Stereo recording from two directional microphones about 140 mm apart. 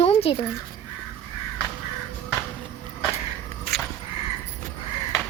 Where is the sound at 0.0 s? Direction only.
45° left (ahead or behind).